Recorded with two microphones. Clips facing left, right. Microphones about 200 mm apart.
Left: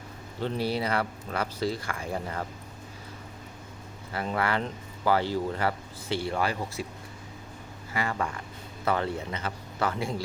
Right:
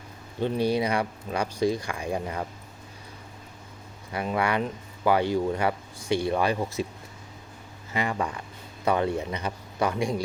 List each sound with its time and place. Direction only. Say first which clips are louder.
0.3 s speech: right 4 dB; 15° right (ahead or behind)
4.1 s speech: right 2 dB; 15° right (ahead or behind)
7.9 s speech: right 2 dB; 20° right (ahead or behind)